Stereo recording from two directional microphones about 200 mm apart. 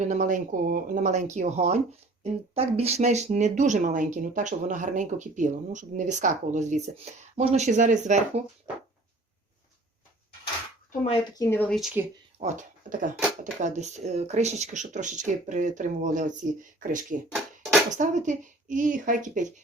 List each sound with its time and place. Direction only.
0.0 s speech: 40° right (ahead or behind)
11.3 s speech: 10° left (ahead or behind)
12.4 s speech: 40° right (ahead or behind)
17.3 s a sound: centre (ahead or behind)
17.9 s speech: 40° right (ahead or behind)